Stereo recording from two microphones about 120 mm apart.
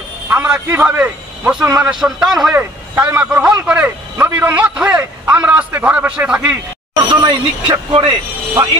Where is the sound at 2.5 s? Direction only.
15° right (ahead or behind).